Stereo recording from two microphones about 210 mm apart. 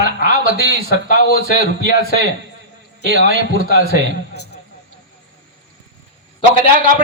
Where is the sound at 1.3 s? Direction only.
45° left (ahead or behind).